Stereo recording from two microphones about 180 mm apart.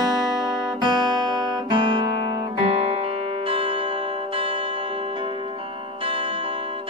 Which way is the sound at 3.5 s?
30° right (ahead or behind).